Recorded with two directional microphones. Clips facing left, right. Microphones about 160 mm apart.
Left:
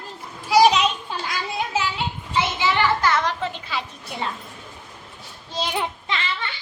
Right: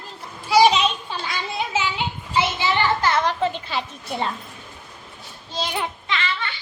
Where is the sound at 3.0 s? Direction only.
25° right (ahead or behind).